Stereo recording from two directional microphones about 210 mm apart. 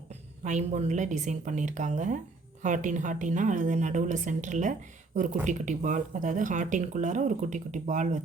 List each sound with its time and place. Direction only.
0.1 s speech: 35° right (ahead or behind)